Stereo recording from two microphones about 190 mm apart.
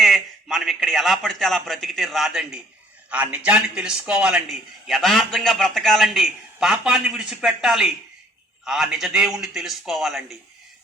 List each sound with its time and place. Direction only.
0.0 s a man's voice: centre (ahead or behind)